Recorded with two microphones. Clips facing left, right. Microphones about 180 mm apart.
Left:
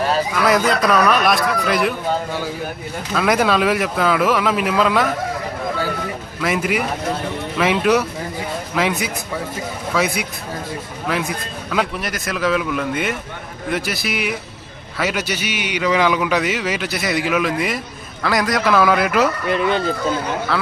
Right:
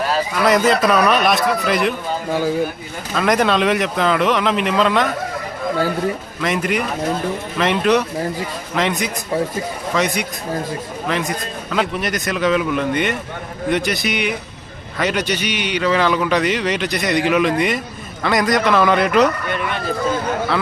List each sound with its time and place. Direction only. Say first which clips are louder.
0.4 s a man's voice: right 3 dB; centre (ahead or behind)
3.2 s a man's voice: right 1 dB; 5° left (ahead or behind)
6.4 s a man's voice: even; 5° left (ahead or behind)
19.5 s speech: left 5 dB; 30° left (ahead or behind)